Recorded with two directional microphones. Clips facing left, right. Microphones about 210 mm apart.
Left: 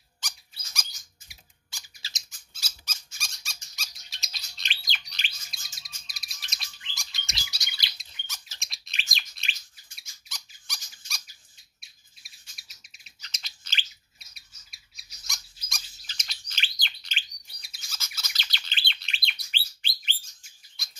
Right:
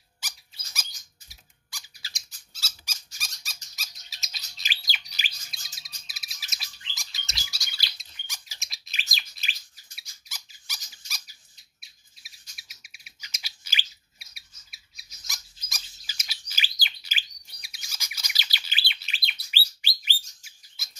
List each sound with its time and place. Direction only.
0.2 s squeak: 10° right (ahead or behind)
1.7 s squeak: 25° left (ahead or behind)
2.8 s squeak: 5° right (ahead or behind)
3.7 s bird: centre (ahead or behind)
7.2 s bird: 20° left (ahead or behind)
8.3 s a sound: 10° right (ahead or behind)
8.6 s bird: centre (ahead or behind)